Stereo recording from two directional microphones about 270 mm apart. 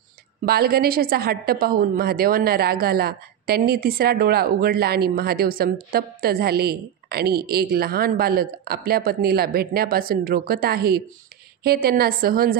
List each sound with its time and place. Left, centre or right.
0.5 s a woman's voice: right